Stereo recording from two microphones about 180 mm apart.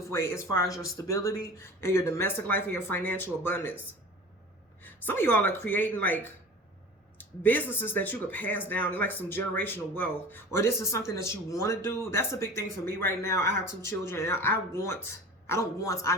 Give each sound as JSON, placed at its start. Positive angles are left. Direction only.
{"t": 0.0, "sound": "speech", "side_deg": 15}
{"t": 4.8, "sound": "speech", "side_deg": 10}
{"t": 7.2, "sound": "speech", "side_deg": 10}